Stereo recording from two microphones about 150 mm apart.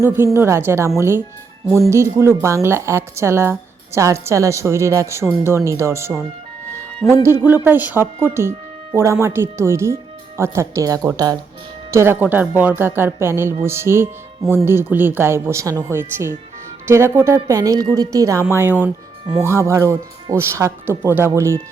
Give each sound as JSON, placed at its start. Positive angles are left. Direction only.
{"t": 0.3, "sound": "speech", "side_deg": -15}
{"t": 7.0, "sound": "speech", "side_deg": 15}
{"t": 7.4, "sound": "speech", "side_deg": -15}